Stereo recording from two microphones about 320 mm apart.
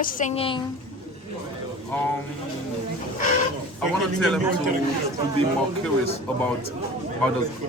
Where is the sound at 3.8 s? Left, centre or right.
Centre.